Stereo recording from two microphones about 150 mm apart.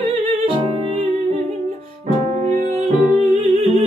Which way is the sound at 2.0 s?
45° right (ahead or behind).